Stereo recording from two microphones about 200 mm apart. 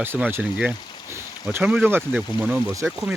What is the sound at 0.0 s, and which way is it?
Speech, 10° right (ahead or behind).